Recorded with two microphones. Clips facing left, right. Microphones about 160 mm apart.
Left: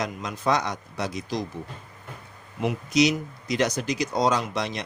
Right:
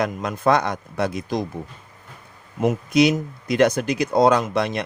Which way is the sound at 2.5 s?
50° right (ahead or behind).